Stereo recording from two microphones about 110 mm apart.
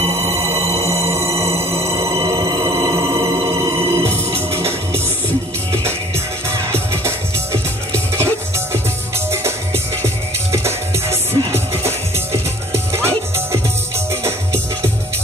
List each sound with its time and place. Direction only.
0.0 s music: 70° right (ahead or behind)
1.9 s music: 25° right (ahead or behind)
6.5 s music: 25° right (ahead or behind)
10.0 s music: 25° right (ahead or behind)